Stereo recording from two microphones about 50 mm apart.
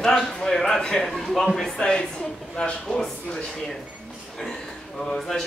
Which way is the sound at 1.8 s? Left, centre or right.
Centre.